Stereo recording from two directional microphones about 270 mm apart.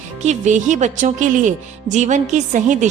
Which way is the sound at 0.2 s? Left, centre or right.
Right.